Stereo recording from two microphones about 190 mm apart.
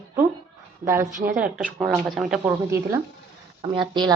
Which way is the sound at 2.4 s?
15° right (ahead or behind).